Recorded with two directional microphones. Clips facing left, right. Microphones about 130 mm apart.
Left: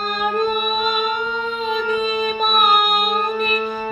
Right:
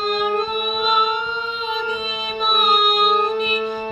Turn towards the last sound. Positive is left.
turn(degrees=50)  # may be behind; listen again after turning